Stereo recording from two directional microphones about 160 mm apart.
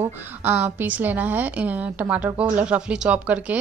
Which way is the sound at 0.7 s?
10° right (ahead or behind).